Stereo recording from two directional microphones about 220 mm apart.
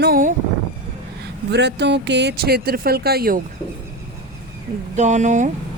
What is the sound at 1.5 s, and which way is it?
Speech, 50° right (ahead or behind).